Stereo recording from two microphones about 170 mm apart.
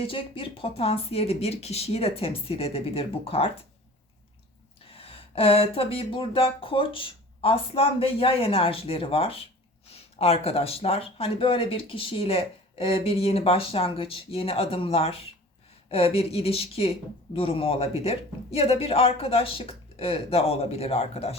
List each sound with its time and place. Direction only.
0.0 s a woman's voice: 30° left (ahead or behind)
4.9 s a woman's voice: 35° left (ahead or behind)